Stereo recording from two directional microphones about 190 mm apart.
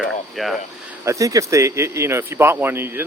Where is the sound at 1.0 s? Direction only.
15° right (ahead or behind).